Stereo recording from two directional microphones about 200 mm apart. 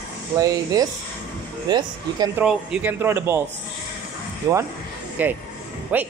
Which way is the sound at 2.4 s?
5° right (ahead or behind).